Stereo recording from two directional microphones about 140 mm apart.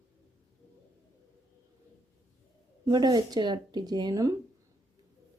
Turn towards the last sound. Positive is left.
turn(degrees=-25)  # may be behind; listen again after turning